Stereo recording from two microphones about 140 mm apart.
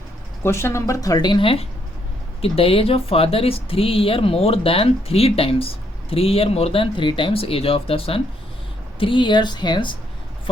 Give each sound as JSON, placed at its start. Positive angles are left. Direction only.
{"t": 0.4, "sound": "speech", "side_deg": 20}